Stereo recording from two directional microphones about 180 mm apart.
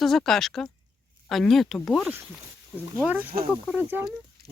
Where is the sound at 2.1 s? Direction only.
10° right (ahead or behind).